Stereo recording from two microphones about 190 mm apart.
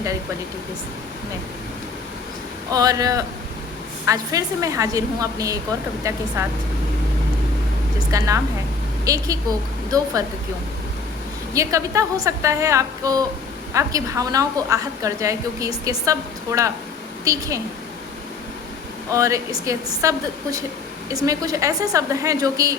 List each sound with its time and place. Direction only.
2.6 s a woman's voice: 20° right (ahead or behind)
8.1 s a woman's voice: 20° right (ahead or behind)
11.5 s a woman's voice: 15° right (ahead or behind)
19.1 s a woman's voice: 15° right (ahead or behind)